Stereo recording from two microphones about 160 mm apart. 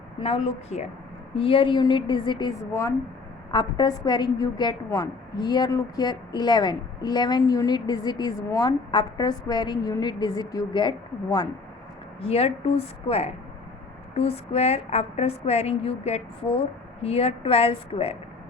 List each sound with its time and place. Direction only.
0.2 s a woman's voice: 40° left (ahead or behind)
3.5 s a woman's voice: 25° left (ahead or behind)
12.2 s a woman's voice: 40° left (ahead or behind)